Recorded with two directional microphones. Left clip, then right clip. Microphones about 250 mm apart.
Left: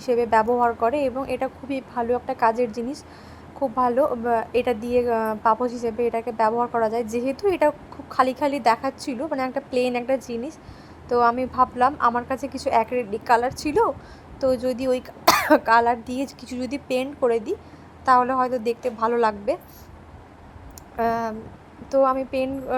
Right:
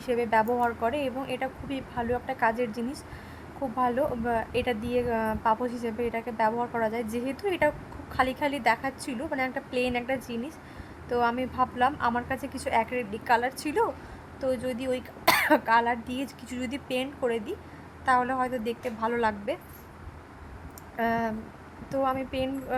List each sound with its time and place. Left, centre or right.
0.0 s a woman's voice: centre
20.9 s a woman's voice: centre